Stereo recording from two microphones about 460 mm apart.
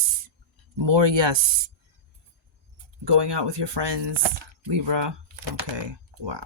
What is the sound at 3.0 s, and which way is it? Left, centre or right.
Speech, right.